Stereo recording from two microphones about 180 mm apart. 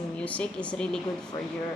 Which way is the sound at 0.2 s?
5° left (ahead or behind).